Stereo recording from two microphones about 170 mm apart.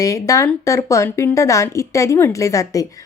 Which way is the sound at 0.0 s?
20° left (ahead or behind).